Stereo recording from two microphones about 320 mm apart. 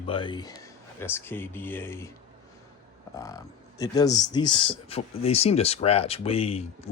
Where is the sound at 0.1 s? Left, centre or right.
Centre.